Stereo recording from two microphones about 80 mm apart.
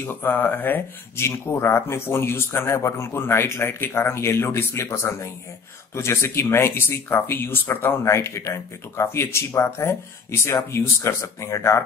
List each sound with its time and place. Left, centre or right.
0.0 s speech: left
8.0 s speech: left